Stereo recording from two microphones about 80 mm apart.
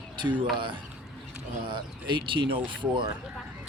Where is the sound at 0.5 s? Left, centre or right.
Right.